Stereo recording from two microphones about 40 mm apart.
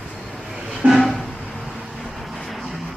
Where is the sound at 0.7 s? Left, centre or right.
Centre.